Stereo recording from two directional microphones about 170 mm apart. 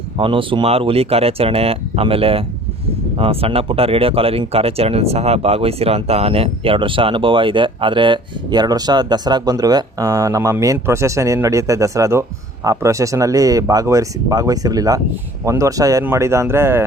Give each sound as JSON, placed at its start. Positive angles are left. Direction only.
{"t": 0.2, "sound": "speech", "side_deg": -30}